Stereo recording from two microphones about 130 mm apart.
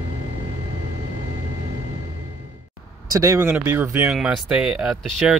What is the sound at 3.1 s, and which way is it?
Speech, 25° right (ahead or behind).